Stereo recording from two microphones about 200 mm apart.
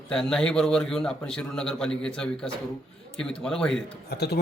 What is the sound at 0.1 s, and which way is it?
A man's voice, 5° left (ahead or behind).